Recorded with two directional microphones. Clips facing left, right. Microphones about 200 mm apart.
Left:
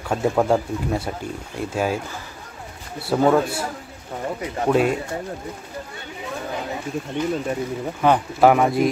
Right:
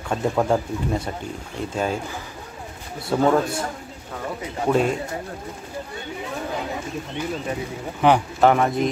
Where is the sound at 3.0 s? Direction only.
5° left (ahead or behind).